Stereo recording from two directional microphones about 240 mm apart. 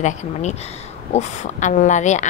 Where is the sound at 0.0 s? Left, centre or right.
Left.